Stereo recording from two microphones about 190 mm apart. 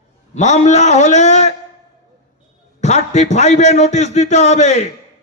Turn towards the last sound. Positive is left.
turn(degrees=35)  # may be behind; listen again after turning